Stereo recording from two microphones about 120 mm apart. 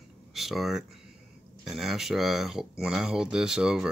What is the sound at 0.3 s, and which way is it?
Speech, centre (ahead or behind).